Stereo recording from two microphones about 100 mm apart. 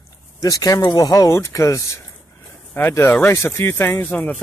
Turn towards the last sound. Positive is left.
turn(degrees=20)  # may be behind; listen again after turning